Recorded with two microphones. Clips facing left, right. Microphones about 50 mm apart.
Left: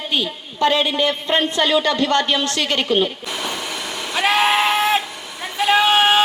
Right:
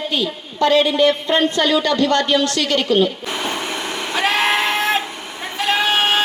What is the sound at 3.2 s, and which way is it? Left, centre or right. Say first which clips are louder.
Vacuum cleaner: right 3 dB; right.